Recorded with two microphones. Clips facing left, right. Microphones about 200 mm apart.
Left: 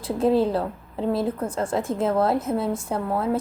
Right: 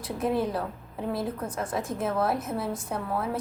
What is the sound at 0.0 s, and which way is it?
A woman's voice, 25° left (ahead or behind).